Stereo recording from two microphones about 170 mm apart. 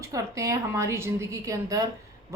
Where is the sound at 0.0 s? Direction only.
20° right (ahead or behind).